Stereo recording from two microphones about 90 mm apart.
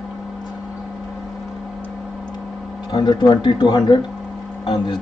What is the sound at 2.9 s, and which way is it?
A man's voice, 55° left (ahead or behind).